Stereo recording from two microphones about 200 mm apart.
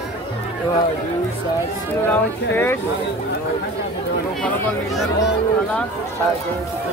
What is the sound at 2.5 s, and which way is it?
Speech, 10° left (ahead or behind).